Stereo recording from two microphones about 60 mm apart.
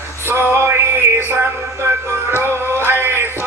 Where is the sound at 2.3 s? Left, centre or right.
Right.